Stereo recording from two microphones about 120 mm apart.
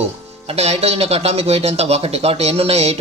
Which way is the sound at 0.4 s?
60° right (ahead or behind).